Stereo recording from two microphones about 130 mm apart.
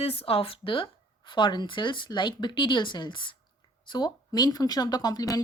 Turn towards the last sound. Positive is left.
turn(degrees=30)  # may be behind; listen again after turning